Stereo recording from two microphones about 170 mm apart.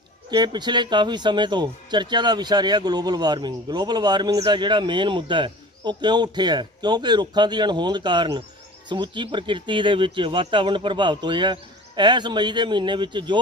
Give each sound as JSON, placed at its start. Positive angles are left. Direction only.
{"t": 0.3, "sound": "a man's voice", "side_deg": -25}